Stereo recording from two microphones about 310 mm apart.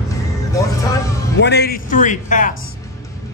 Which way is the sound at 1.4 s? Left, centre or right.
Left.